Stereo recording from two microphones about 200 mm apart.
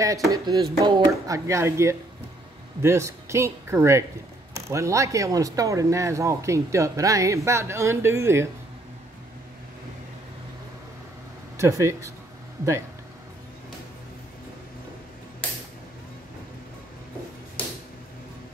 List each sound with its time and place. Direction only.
0.3 s speech: 20° right (ahead or behind)
11.5 s speech: 15° right (ahead or behind)